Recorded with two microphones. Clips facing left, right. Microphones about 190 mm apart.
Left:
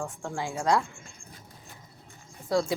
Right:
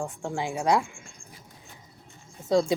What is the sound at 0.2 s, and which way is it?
Speech, 20° right (ahead or behind).